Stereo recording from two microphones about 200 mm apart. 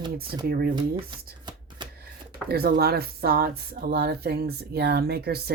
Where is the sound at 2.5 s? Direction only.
50° right (ahead or behind).